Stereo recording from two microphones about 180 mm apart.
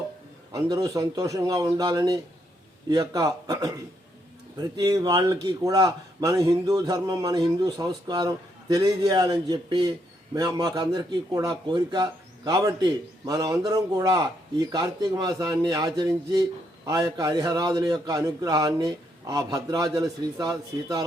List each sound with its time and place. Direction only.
0.5 s a man's voice: 20° right (ahead or behind)